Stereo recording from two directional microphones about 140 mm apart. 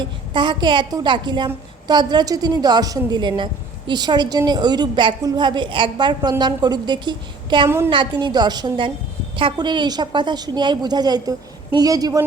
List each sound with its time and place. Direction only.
0.0 s a woman's voice: 35° right (ahead or behind)